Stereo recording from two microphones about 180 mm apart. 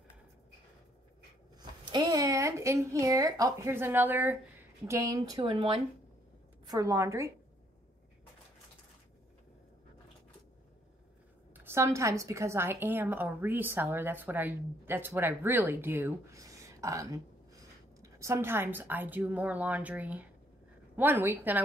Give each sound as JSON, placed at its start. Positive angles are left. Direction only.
{"t": 1.9, "sound": "a woman's voice", "side_deg": -20}
{"t": 11.5, "sound": "a woman's voice", "side_deg": -15}